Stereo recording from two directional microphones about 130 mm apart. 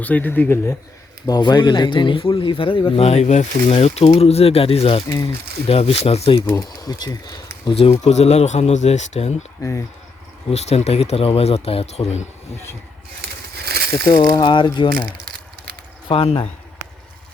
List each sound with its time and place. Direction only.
0.0 s speech: 15° left (ahead or behind)
1.3 s speech: 35° left (ahead or behind); by 5.0 s 50° left (ahead or behind)
5.0 s speech: 25° left (ahead or behind)
5.6 s speech: 50° left (ahead or behind)
6.4 s speech: 15° left (ahead or behind)
6.8 s speech: 30° left (ahead or behind)
7.8 s speech: 55° left (ahead or behind)
9.6 s speech: 20° left (ahead or behind)
10.5 s speech: 55° left (ahead or behind)
14.1 s speech: 30° left (ahead or behind)
16.0 s speech: 45° left (ahead or behind)